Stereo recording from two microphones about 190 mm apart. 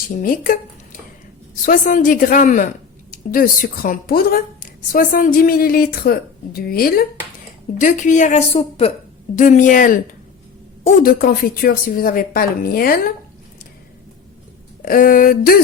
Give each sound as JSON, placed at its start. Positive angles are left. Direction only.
{"t": 0.2, "sound": "a woman's voice", "side_deg": 45}
{"t": 1.6, "sound": "a woman's voice", "side_deg": 45}
{"t": 11.0, "sound": "a woman's voice", "side_deg": 50}
{"t": 14.8, "sound": "a woman's voice", "side_deg": 45}